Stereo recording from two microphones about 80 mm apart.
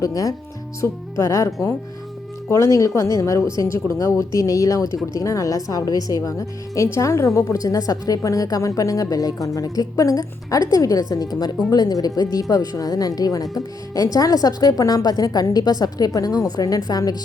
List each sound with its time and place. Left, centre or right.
0.0 s a woman's voice: left
6.8 s a woman's voice: left